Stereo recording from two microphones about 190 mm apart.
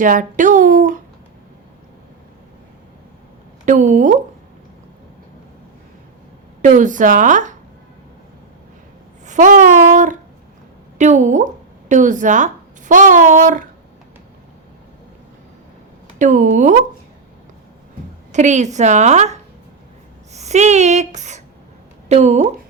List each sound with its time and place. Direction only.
0.0 s speech: 45° right (ahead or behind)
3.7 s a woman's voice: 40° right (ahead or behind)
6.6 s a woman's voice: 40° right (ahead or behind)
9.2 s a sound: 40° right (ahead or behind)
10.9 s a woman's voice: 40° right (ahead or behind)
16.1 s a woman's voice: 40° right (ahead or behind)
18.3 s a woman's voice: 40° right (ahead or behind)